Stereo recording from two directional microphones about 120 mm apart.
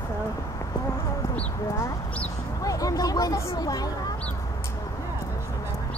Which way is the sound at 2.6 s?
30° left (ahead or behind).